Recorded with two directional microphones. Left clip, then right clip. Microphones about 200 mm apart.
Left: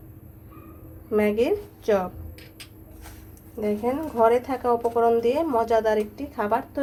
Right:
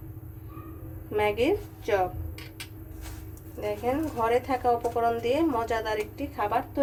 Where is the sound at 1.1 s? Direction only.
30° left (ahead or behind).